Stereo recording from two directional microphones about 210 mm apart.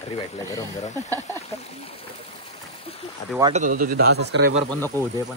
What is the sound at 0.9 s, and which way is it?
Speech, 15° right (ahead or behind).